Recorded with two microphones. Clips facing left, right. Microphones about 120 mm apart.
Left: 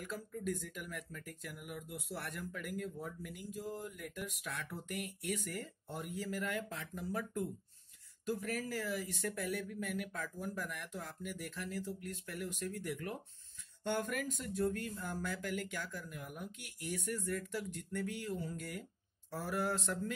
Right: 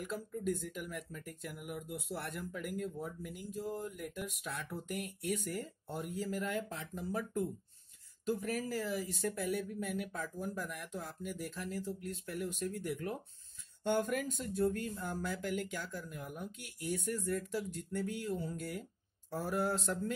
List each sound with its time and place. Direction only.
0.0 s speech: 20° right (ahead or behind)